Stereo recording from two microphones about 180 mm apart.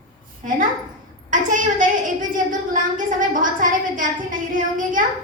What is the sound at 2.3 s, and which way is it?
A woman's voice, 45° right (ahead or behind).